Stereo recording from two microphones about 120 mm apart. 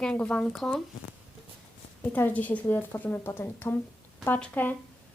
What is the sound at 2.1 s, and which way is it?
Speech, 15° left (ahead or behind).